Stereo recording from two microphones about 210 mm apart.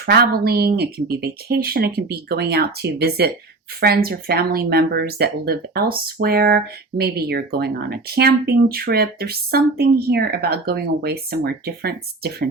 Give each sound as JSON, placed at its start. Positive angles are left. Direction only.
{"t": 0.0, "sound": "speech", "side_deg": -50}